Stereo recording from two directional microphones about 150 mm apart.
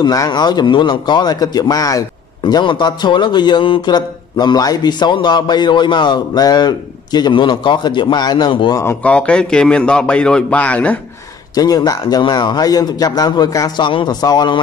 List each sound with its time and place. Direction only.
0.0 s a man's voice: 25° left (ahead or behind)
8.7 s a man's voice: 15° left (ahead or behind)
11.5 s a man's voice: 25° left (ahead or behind)